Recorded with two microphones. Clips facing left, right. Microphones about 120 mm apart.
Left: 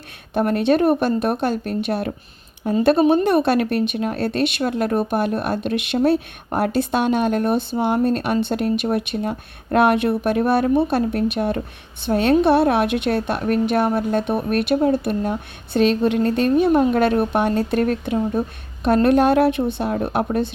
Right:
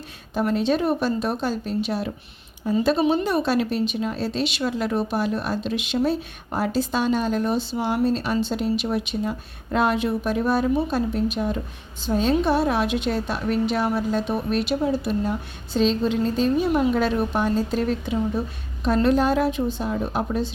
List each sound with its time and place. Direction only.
0.3 s a woman's voice: 60° left (ahead or behind)